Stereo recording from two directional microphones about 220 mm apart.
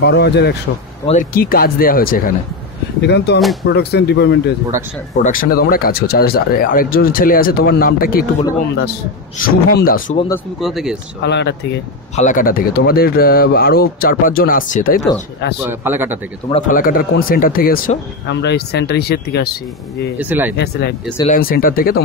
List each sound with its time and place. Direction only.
0.0 s speech: 50° left (ahead or behind)
1.0 s speech: 35° left (ahead or behind)
5.1 s speech: 35° left (ahead or behind)
9.4 s speech: 40° left (ahead or behind)
10.6 s speech: centre (ahead or behind)
11.2 s speech: 50° left (ahead or behind)
12.2 s speech: 35° left (ahead or behind)
15.6 s a man's voice: 10° right (ahead or behind)
16.6 s speech: 40° left (ahead or behind)
20.2 s a man's voice: 10° right (ahead or behind)
20.5 s speech: 50° left (ahead or behind)